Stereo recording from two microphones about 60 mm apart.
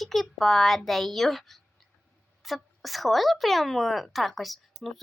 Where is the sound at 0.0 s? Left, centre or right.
Centre.